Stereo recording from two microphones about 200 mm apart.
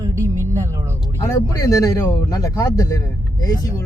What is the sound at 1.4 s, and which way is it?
Speech, 15° left (ahead or behind).